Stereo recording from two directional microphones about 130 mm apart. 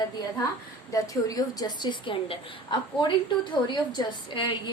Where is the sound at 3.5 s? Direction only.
35° left (ahead or behind).